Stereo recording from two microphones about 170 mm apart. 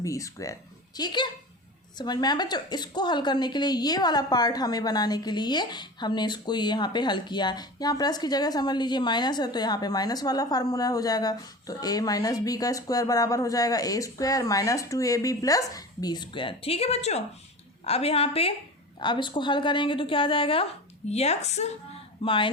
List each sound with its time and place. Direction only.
0.0 s a woman's voice: 20° left (ahead or behind)